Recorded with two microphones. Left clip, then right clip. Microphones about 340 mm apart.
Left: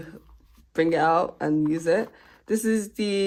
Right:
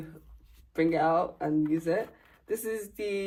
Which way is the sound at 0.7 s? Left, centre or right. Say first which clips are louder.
Left 5 dB; left.